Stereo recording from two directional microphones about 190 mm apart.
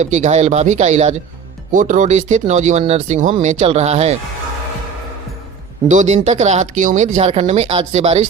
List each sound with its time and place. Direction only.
0.0 s speech: 35° right (ahead or behind)
5.9 s speech: 40° right (ahead or behind)